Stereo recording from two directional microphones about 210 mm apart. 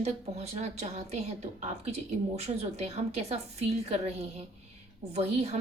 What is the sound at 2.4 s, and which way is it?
A woman's voice, 30° right (ahead or behind).